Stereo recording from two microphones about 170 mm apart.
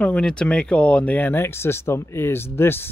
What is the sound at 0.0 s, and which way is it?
Speech, 5° left (ahead or behind).